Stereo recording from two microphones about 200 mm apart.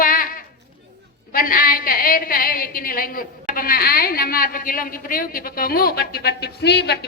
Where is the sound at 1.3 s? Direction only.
45° left (ahead or behind).